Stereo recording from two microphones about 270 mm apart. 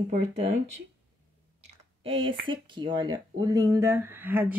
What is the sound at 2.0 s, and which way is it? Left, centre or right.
Speech, centre.